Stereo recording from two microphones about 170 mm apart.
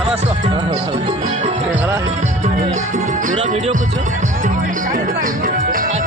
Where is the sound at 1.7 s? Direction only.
15° right (ahead or behind).